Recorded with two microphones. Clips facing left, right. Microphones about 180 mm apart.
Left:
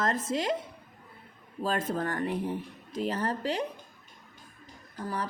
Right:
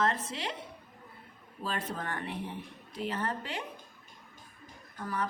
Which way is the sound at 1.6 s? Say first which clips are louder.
Left 7 dB; 45° left (ahead or behind).